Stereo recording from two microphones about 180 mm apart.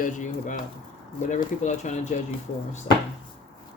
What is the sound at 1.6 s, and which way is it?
Speech, 40° left (ahead or behind).